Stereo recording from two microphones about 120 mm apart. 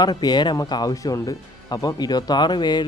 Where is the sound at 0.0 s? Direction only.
35° left (ahead or behind).